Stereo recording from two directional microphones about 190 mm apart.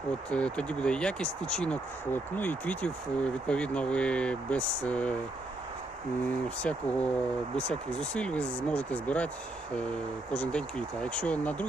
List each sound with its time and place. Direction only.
0.3 s speech: 5° left (ahead or behind)
6.6 s speech: 5° left (ahead or behind)
10.3 s speech: 5° left (ahead or behind)